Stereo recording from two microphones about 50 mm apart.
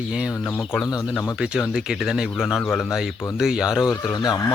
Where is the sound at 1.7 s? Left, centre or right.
Centre.